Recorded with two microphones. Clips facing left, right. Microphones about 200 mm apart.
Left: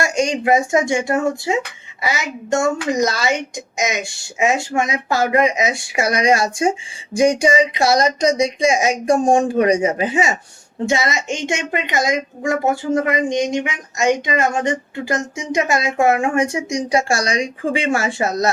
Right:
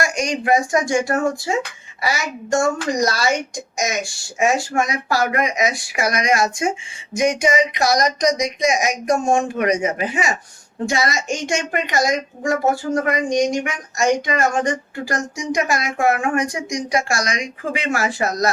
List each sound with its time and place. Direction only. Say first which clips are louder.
0.0 s speech: left 3 dB; 25° left (ahead or behind)